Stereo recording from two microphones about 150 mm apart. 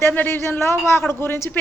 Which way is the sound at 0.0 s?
15° left (ahead or behind).